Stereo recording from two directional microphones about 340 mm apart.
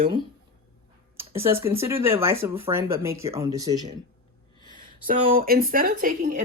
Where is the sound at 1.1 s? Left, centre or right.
Centre.